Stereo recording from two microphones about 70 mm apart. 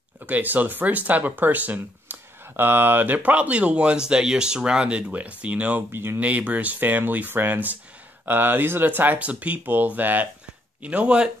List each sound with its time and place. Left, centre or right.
0.3 s speech: right
5.9 s speech: right
6.1 s speech: right